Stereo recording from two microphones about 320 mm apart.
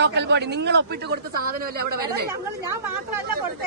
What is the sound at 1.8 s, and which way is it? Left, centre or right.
Speech, right.